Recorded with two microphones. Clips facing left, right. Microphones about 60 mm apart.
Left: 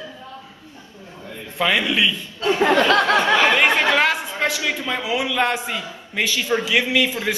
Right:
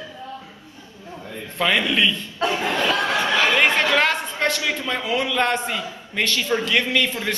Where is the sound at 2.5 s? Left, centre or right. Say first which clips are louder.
Left 9 dB; left.